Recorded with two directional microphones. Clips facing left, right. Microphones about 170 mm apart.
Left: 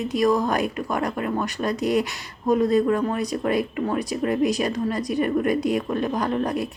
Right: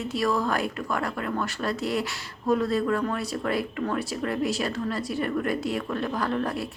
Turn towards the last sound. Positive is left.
turn(degrees=15)  # may be behind; listen again after turning